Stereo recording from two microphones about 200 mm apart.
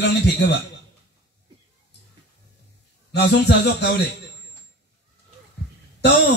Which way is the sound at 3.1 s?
55° left (ahead or behind).